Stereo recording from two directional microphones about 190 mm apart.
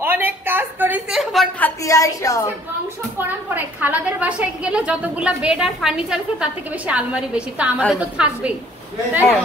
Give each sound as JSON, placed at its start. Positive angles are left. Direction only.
{"t": 0.0, "sound": "a sound", "side_deg": -10}
{"t": 1.8, "sound": "a woman's voice", "side_deg": 15}
{"t": 3.5, "sound": "a woman's voice", "side_deg": -10}